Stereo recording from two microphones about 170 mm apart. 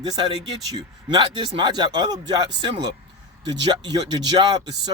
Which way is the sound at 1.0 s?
30° right (ahead or behind).